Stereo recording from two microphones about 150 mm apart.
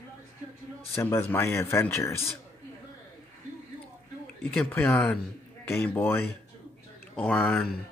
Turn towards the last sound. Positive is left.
turn(degrees=5)  # may be behind; listen again after turning